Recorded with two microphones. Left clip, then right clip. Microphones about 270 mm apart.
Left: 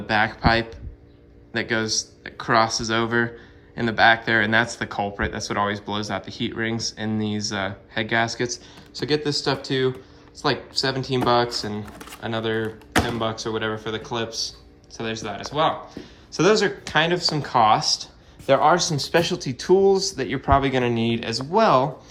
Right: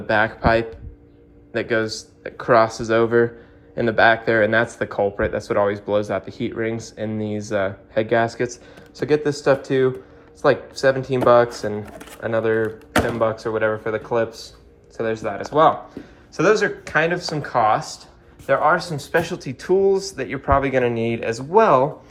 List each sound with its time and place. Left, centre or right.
0.1 s speech: centre
20.9 s speech: left
21.2 s speech: centre